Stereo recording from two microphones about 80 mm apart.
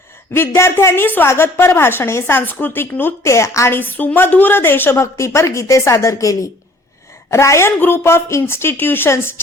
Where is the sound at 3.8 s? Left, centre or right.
Left.